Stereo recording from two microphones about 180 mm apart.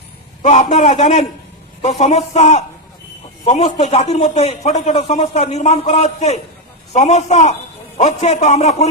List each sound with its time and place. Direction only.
0.4 s a man's voice: 40° left (ahead or behind)